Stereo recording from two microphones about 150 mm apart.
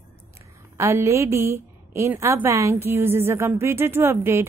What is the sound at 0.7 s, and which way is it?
A woman's voice, 20° right (ahead or behind).